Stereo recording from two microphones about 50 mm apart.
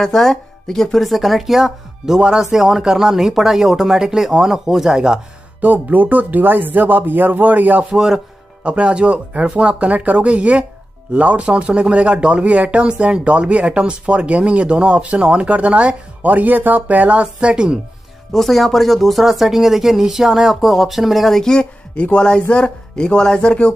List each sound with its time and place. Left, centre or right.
0.0 s speech: centre
5.6 s speech: right
7.9 s speech: centre
8.6 s speech: right
18.3 s speech: centre
21.4 s speech: centre
21.9 s speech: left